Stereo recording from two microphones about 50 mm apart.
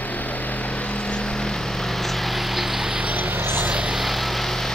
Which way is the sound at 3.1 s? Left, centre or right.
Right.